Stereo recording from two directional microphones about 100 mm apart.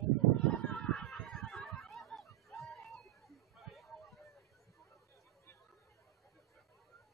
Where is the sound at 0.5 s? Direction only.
5° left (ahead or behind).